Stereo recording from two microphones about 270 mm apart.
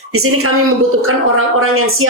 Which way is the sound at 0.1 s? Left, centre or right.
Right.